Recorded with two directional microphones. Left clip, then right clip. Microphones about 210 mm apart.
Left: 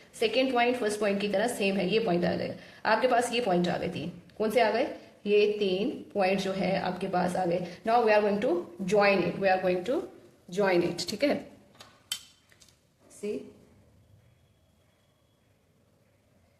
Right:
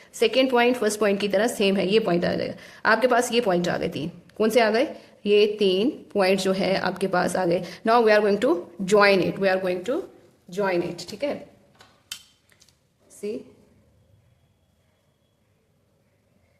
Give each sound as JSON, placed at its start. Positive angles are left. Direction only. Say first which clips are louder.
{"t": 0.2, "sound": "a woman's voice", "louder": "right 6 dB", "side_deg": -35}
{"t": 10.5, "sound": "speech", "louder": "right 1 dB", "side_deg": -10}